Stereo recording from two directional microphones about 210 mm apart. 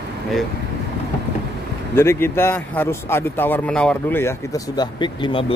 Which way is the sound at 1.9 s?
10° left (ahead or behind).